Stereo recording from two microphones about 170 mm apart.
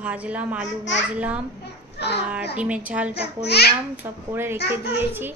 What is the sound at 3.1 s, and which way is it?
Speech, 75° left (ahead or behind).